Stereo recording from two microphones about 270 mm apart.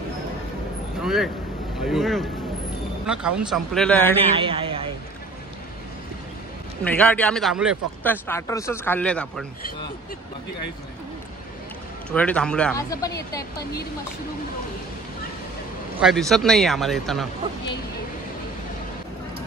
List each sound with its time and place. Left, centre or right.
1.0 s a man's voice: centre
4.4 s a man's voice: centre
6.8 s a man's voice: centre
12.1 s a man's voice: centre
16.0 s a man's voice: centre